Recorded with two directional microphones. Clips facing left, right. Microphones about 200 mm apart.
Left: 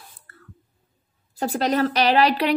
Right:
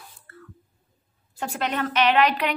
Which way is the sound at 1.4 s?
35° left (ahead or behind).